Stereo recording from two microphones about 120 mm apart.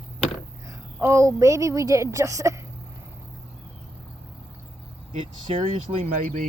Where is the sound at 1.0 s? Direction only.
25° right (ahead or behind).